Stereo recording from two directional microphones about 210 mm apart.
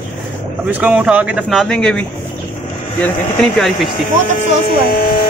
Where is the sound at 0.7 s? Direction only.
5° right (ahead or behind).